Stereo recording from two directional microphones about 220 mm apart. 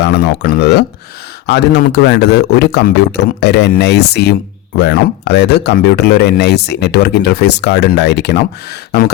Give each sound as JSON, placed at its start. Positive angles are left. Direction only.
{"t": 0.0, "sound": "speech", "side_deg": 50}